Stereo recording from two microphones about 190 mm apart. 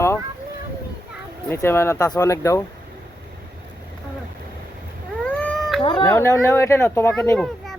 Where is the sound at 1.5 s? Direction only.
15° left (ahead or behind).